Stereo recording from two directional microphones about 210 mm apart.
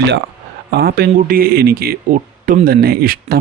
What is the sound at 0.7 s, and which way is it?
Speech, 50° right (ahead or behind).